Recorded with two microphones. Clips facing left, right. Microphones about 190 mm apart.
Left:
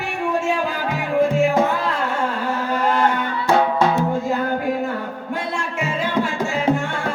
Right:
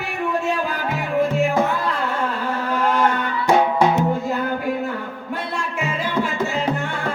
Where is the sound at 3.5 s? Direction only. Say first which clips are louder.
Right 1 dB; 15° right (ahead or behind).